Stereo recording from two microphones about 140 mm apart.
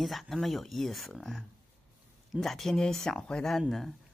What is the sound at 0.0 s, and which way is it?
Speech, centre (ahead or behind).